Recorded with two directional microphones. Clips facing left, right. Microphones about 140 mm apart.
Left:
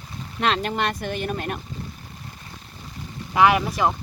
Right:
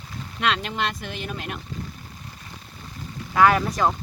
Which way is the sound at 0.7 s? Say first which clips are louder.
Left 3 dB; 50° left (ahead or behind).